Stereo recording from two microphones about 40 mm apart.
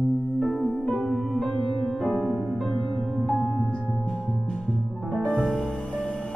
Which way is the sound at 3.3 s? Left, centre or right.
Left.